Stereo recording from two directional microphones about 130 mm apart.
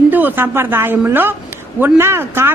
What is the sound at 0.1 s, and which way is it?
Speech, 15° right (ahead or behind).